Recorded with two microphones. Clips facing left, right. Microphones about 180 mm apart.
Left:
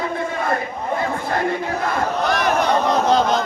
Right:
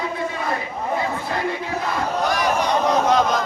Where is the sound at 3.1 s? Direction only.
30° left (ahead or behind).